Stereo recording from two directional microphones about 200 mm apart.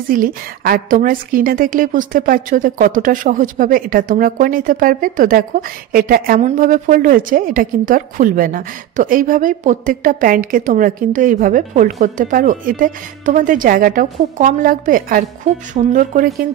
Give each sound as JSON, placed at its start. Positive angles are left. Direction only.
{"t": 0.1, "sound": "a woman's voice", "side_deg": -45}